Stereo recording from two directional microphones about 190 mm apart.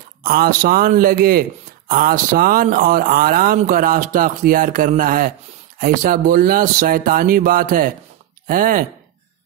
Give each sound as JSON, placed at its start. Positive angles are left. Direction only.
{"t": 0.2, "sound": "speech", "side_deg": -50}